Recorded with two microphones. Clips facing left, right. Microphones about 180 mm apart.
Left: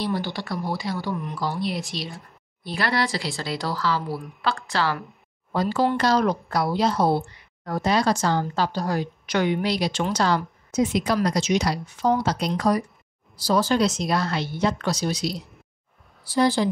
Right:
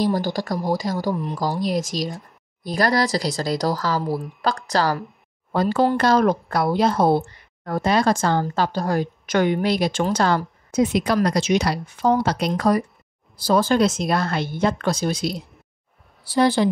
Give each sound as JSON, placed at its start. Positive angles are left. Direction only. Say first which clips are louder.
{"t": 0.0, "sound": "speech", "louder": "right 5 dB", "side_deg": -45}
{"t": 5.5, "sound": "a woman's voice", "louder": "right 3 dB", "side_deg": -55}